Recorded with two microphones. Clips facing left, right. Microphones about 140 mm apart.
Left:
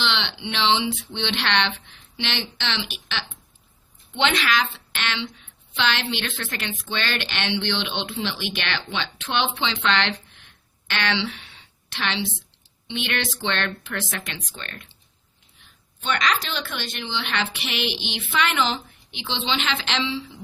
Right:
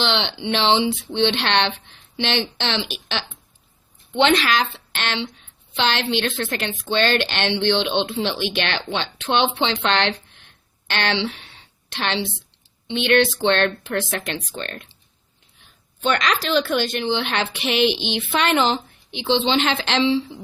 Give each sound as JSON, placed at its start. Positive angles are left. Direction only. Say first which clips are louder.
{"t": 0.0, "sound": "speech", "louder": "right 4 dB", "side_deg": -35}
{"t": 4.4, "sound": "speech", "louder": "right 2 dB", "side_deg": -35}
{"t": 16.0, "sound": "speech", "louder": "right 4 dB", "side_deg": -40}